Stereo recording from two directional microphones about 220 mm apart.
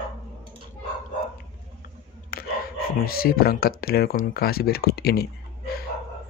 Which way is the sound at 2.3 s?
45° left (ahead or behind).